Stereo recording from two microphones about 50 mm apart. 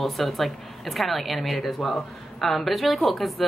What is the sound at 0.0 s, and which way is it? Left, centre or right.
Speech, centre.